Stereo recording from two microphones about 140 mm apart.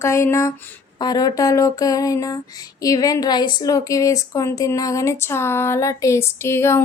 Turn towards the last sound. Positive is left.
turn(degrees=20)  # may be behind; listen again after turning